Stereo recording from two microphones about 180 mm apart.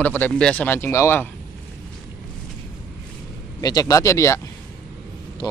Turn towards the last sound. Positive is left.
turn(degrees=15)  # may be behind; listen again after turning